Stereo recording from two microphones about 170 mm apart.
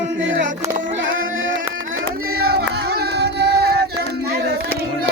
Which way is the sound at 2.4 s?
65° right (ahead or behind).